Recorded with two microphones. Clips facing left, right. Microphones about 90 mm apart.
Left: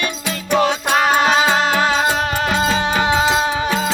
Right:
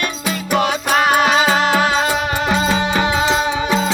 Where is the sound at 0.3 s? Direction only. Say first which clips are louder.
Left 1 dB; 10° right (ahead or behind).